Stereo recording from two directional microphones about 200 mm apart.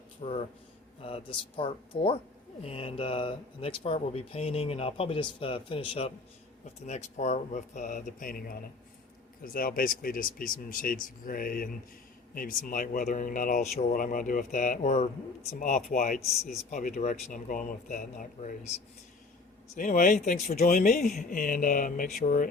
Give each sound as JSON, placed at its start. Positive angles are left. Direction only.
{"t": 0.2, "sound": "speech", "side_deg": 30}
{"t": 19.7, "sound": "speech", "side_deg": 40}